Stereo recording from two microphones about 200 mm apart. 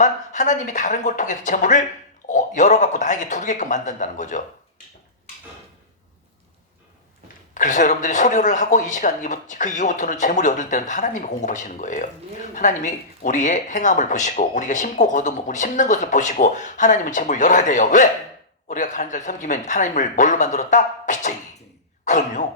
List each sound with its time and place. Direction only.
0.0 s speech: 40° left (ahead or behind)
7.5 s speech: 40° left (ahead or behind)
22.0 s throat clearing: 40° left (ahead or behind)